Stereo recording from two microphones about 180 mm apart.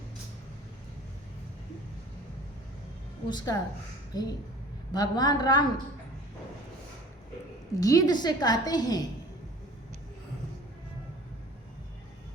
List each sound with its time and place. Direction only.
3.2 s a woman's voice: 20° left (ahead or behind)
7.8 s a woman's voice: 20° left (ahead or behind)